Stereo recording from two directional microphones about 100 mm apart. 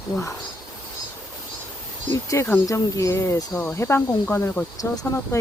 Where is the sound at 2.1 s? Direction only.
30° left (ahead or behind).